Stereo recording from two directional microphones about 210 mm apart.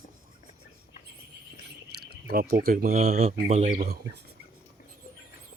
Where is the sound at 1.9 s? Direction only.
50° right (ahead or behind).